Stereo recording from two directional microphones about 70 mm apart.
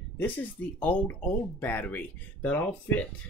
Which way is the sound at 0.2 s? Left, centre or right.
Left.